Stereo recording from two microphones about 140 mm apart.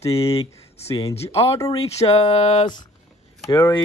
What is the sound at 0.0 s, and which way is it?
Speech, 45° left (ahead or behind).